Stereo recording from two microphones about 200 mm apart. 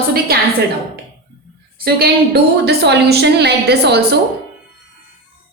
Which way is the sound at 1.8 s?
50° right (ahead or behind).